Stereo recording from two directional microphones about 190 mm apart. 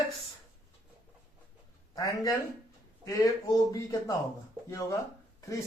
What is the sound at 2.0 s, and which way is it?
Speech, 20° left (ahead or behind).